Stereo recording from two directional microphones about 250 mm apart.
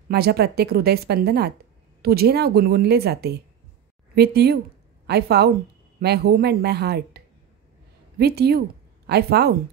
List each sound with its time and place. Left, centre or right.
0.1 s a woman's voice: right